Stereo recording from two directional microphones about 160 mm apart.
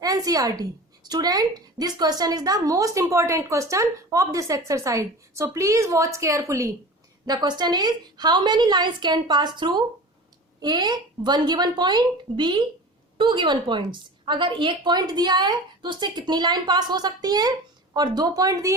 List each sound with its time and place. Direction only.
0.0 s a woman's voice: 20° right (ahead or behind)